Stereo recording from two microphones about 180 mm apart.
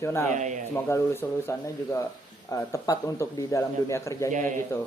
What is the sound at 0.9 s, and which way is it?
Speech, 15° left (ahead or behind).